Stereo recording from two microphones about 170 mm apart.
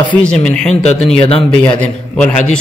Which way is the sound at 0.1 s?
5° left (ahead or behind).